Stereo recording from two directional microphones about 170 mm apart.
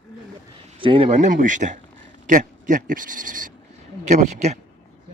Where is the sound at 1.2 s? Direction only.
50° right (ahead or behind).